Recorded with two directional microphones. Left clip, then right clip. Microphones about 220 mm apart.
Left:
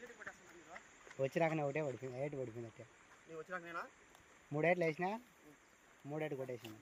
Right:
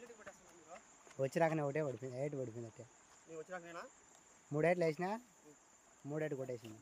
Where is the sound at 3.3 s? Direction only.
15° right (ahead or behind).